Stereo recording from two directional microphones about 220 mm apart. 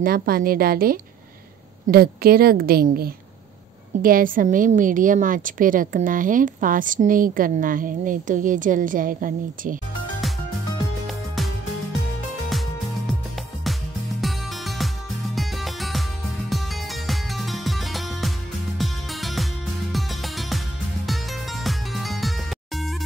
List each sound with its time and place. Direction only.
0.0 s a woman's voice: 40° right (ahead or behind)
11.1 s music: centre (ahead or behind)
14.2 s music: centre (ahead or behind)